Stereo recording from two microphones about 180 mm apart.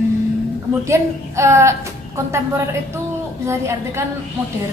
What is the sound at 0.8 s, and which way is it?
Speech, 15° right (ahead or behind).